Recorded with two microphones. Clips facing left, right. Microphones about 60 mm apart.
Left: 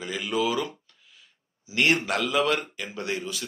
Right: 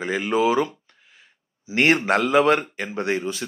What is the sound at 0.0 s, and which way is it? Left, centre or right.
Speech, right.